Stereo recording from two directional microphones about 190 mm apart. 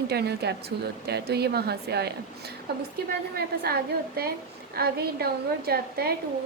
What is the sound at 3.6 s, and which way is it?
A woman's voice, 55° right (ahead or behind).